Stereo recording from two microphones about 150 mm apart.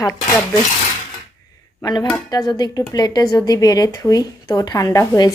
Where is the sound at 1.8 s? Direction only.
25° left (ahead or behind).